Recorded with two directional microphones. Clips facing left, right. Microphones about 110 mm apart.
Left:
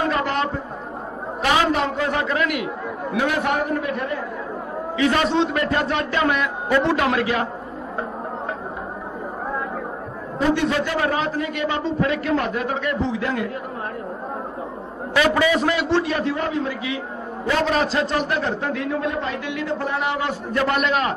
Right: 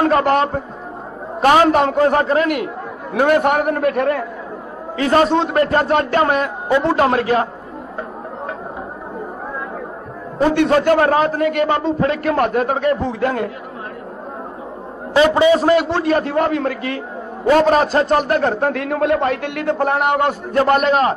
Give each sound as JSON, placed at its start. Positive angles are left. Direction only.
{"t": 0.1, "sound": "a man's voice", "side_deg": -45}
{"t": 4.9, "sound": "a man's voice", "side_deg": -40}
{"t": 10.5, "sound": "a man's voice", "side_deg": -55}
{"t": 15.1, "sound": "a man's voice", "side_deg": -25}
{"t": 17.5, "sound": "a man's voice", "side_deg": -40}